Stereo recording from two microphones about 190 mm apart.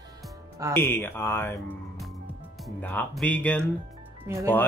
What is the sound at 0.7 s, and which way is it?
Speech, 10° left (ahead or behind).